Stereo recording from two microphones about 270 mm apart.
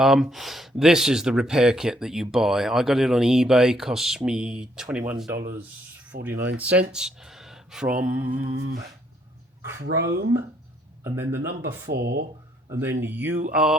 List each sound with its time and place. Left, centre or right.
0.0 s speech: centre
9.8 s speech: right
11.0 s speech: centre
11.6 s speech: right
12.6 s speech: centre